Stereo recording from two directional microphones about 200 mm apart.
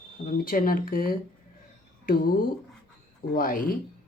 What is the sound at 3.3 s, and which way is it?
Speech, 45° left (ahead or behind).